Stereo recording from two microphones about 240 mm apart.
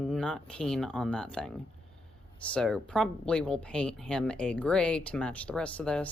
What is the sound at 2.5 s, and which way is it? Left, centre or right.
Speech, centre.